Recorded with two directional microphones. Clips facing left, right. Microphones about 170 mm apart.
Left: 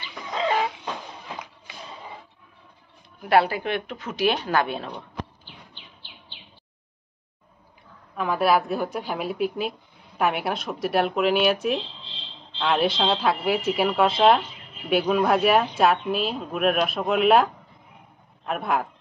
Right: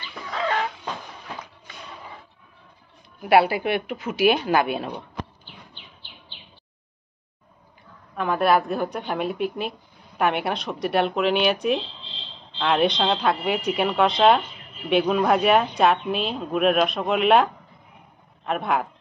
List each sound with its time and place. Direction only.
0.3 s chicken: 20° left (ahead or behind)
3.2 s speech: 10° right (ahead or behind)
8.2 s a woman's voice: centre (ahead or behind)